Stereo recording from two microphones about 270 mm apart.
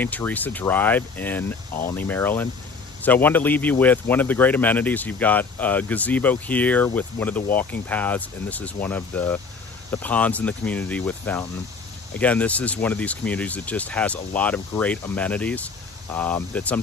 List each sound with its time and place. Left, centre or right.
0.0 s a man's voice: centre